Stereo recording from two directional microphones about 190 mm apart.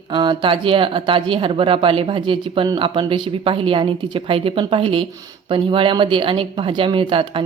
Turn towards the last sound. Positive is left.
turn(degrees=-25)  # may be behind; listen again after turning